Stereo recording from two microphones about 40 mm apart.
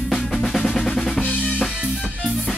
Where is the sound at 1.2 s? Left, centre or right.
Left.